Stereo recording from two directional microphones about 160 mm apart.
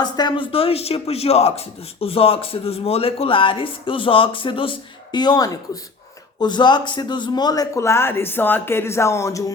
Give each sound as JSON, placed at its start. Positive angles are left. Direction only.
{"t": 0.0, "sound": "a man's voice", "side_deg": 25}